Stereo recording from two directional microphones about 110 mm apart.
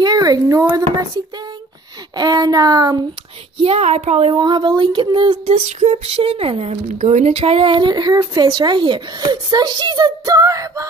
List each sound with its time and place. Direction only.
0.0 s a sound: 35° right (ahead or behind)
2.1 s speech: 40° right (ahead or behind)
3.6 s speech: 80° right
4.3 s speech: 45° right (ahead or behind)
5.5 s a woman's voice: 85° right; by 6.8 s 60° right (ahead or behind)
6.9 s speech: 90° right; by 10.9 s 30° right (ahead or behind)